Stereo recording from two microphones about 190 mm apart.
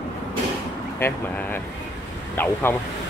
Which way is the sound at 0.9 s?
10° left (ahead or behind).